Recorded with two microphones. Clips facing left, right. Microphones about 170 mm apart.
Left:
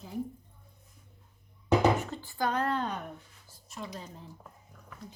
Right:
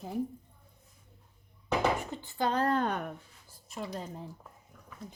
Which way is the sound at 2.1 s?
20° right (ahead or behind).